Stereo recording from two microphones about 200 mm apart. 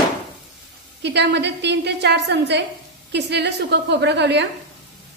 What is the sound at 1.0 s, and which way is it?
A woman's voice, 60° right (ahead or behind).